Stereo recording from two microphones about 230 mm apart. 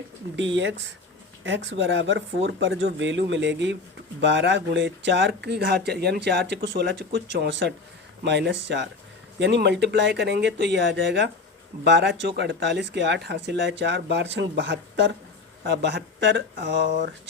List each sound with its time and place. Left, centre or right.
0.3 s speech: right